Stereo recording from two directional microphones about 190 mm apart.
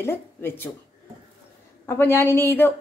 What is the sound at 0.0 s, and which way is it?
Speech, 10° left (ahead or behind).